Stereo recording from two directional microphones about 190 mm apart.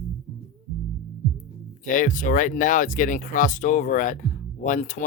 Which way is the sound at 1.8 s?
45° left (ahead or behind).